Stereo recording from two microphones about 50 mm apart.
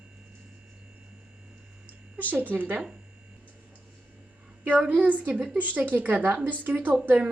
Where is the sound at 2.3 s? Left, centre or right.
Right.